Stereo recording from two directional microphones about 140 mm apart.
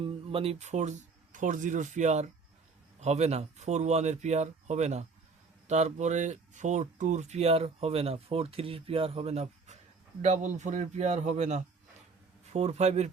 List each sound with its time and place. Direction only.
0.0 s speech: 40° right (ahead or behind)